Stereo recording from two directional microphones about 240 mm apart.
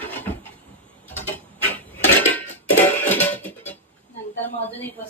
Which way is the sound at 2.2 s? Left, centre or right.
Centre.